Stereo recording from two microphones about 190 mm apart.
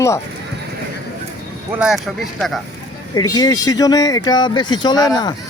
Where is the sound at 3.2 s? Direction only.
20° left (ahead or behind).